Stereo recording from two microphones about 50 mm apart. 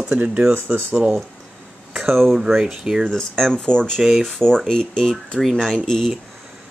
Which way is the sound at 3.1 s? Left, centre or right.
Centre.